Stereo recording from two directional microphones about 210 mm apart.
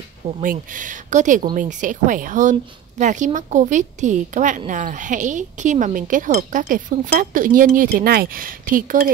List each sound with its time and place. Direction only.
0.4 s a woman's voice: 40° right (ahead or behind)